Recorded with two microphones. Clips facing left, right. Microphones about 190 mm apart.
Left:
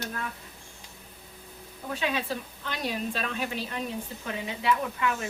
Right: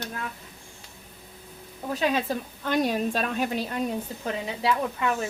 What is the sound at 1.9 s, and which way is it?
Speech, 40° right (ahead or behind).